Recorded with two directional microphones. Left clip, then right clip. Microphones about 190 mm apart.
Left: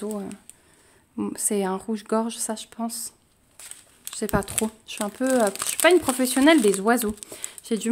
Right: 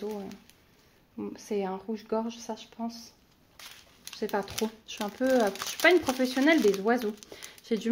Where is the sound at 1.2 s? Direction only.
55° left (ahead or behind).